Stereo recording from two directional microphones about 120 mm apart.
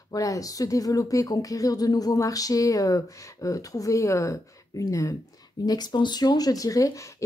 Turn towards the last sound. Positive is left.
turn(degrees=30)  # may be behind; listen again after turning